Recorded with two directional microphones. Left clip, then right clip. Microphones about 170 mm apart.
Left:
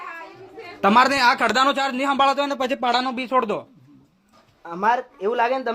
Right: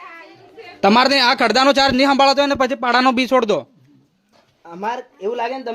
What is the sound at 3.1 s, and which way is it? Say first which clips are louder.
Speech: right 6 dB; 90° right.